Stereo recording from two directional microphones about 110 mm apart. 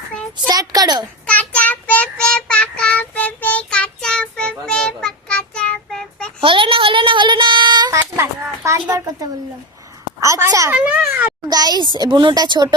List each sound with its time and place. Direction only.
0.4 s a child's voice: 35° right (ahead or behind)
1.3 s child singing: 15° left (ahead or behind)
6.4 s child singing: 50° right (ahead or behind)
7.9 s a sound: 25° right (ahead or behind)
10.2 s a child's voice: 30° right (ahead or behind)
10.7 s speech: 10° right (ahead or behind)
11.4 s a child's voice: 40° right (ahead or behind)